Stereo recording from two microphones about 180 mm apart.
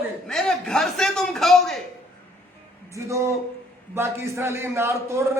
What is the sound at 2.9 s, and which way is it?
A man's voice, 15° right (ahead or behind).